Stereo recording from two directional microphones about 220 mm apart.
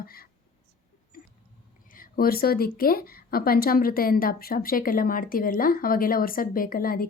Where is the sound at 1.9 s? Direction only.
40° left (ahead or behind).